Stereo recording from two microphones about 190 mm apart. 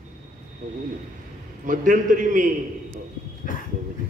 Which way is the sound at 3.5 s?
45° left (ahead or behind).